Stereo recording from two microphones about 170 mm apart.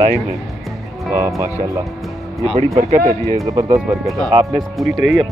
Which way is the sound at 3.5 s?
20° right (ahead or behind).